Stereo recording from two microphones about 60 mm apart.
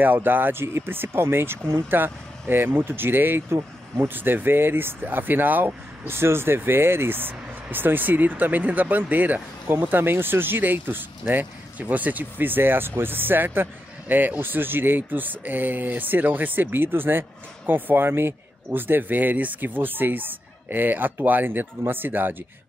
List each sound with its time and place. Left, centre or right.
0.0 s speech: right